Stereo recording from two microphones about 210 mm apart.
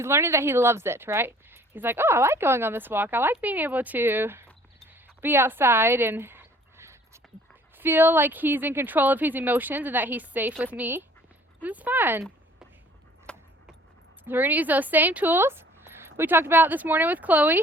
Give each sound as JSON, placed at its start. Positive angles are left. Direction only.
{"t": 0.0, "sound": "a woman's voice", "side_deg": -10}
{"t": 5.2, "sound": "dog", "side_deg": -10}
{"t": 7.8, "sound": "a woman's voice", "side_deg": -10}
{"t": 13.3, "sound": "keys jangling", "side_deg": 5}
{"t": 14.3, "sound": "a woman's voice", "side_deg": -10}